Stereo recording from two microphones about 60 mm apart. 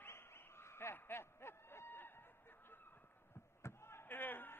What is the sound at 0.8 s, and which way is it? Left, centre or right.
Snicker, left.